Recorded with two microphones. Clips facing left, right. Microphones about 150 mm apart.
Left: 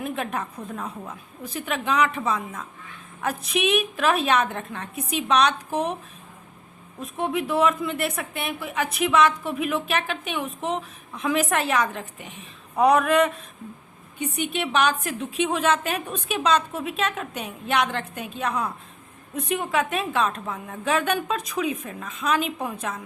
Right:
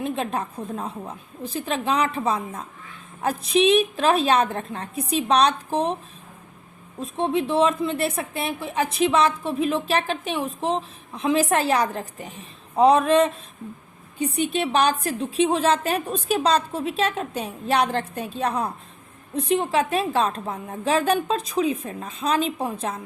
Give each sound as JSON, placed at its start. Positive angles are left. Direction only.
{"t": 0.0, "sound": "a woman's voice", "side_deg": -30}
{"t": 7.0, "sound": "a woman's voice", "side_deg": -30}